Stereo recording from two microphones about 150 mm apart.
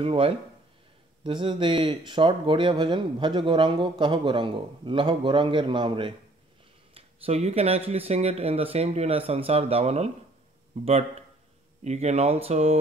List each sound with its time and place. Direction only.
0.0 s speech: 35° right (ahead or behind)
11.8 s speech: 45° right (ahead or behind)